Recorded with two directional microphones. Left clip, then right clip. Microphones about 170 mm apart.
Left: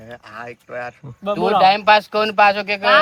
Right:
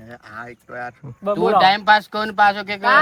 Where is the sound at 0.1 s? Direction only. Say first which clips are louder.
Left 1 dB; 25° left (ahead or behind).